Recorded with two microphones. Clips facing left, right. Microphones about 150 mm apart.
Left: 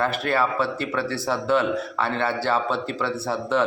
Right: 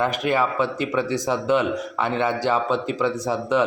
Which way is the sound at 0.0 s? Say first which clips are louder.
Right 1 dB; 15° right (ahead or behind).